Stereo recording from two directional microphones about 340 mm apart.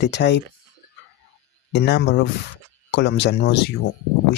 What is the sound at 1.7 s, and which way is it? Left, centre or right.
Speech, left.